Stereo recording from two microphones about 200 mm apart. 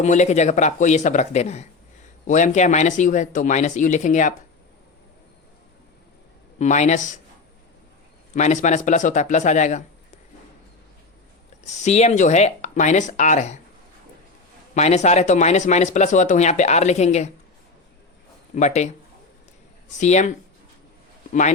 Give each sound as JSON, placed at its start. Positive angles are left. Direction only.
{"t": 0.0, "sound": "speech", "side_deg": 35}
{"t": 6.6, "sound": "speech", "side_deg": 35}
{"t": 8.4, "sound": "speech", "side_deg": 35}
{"t": 11.6, "sound": "speech", "side_deg": 35}
{"t": 14.8, "sound": "speech", "side_deg": 35}
{"t": 18.5, "sound": "speech", "side_deg": 35}
{"t": 20.0, "sound": "speech", "side_deg": 35}